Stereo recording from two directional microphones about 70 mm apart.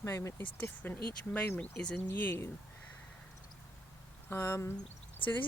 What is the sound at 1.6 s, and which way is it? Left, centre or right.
Speech, centre.